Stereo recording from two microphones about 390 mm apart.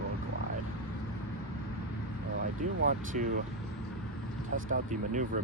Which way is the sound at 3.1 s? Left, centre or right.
Centre.